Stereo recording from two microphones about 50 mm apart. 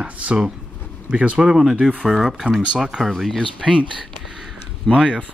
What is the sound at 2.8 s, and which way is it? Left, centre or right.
Speech, centre.